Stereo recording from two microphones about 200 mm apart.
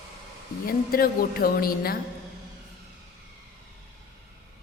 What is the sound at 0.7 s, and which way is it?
A man's voice, 45° left (ahead or behind).